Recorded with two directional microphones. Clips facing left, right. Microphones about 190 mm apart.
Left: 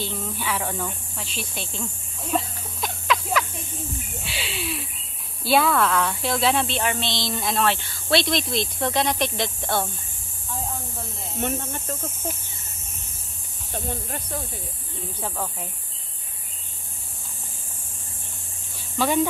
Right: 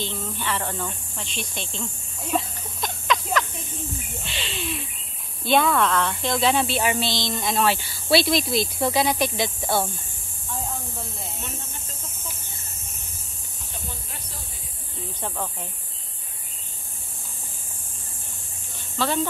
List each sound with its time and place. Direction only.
0.0 s speech: 10° left (ahead or behind)
2.3 s a sound: 5° left (ahead or behind)
5.4 s speech: 5° left (ahead or behind)
11.4 s speech: 60° left (ahead or behind)
13.8 s speech: 55° left (ahead or behind)
15.2 s speech: 5° left (ahead or behind)
18.9 s speech: 15° left (ahead or behind)